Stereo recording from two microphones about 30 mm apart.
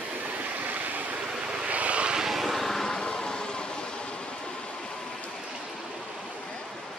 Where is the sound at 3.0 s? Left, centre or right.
Left.